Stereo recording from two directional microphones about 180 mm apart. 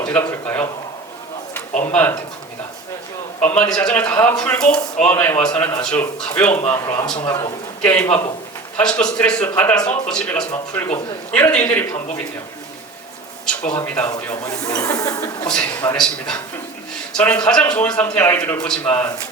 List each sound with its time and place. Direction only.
0.0 s speech: 10° left (ahead or behind)
1.9 s speech: 10° left (ahead or behind)
3.4 s a man's voice: 5° left (ahead or behind)
7.2 s a sound: 25° left (ahead or behind)
7.9 s a man's voice: 10° left (ahead or behind)
13.4 s speech: 5° left (ahead or behind)
14.4 s a sound: 20° left (ahead or behind)
15.9 s a man's voice: 5° left (ahead or behind)